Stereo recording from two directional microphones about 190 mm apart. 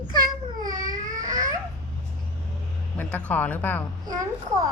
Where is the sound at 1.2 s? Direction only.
20° right (ahead or behind).